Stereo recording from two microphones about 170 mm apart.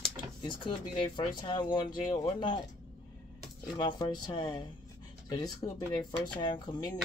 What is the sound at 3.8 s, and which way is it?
Speech, 25° left (ahead or behind).